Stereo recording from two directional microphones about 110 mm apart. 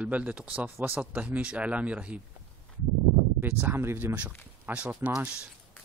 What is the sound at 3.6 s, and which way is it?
A man's voice, 20° right (ahead or behind).